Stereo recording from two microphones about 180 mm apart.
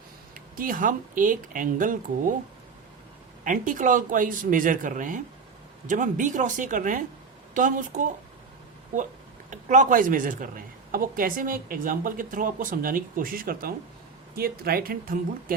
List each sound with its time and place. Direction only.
0.3 s speech: 50° right (ahead or behind)
3.4 s speech: 45° right (ahead or behind)
9.5 s speech: 45° right (ahead or behind)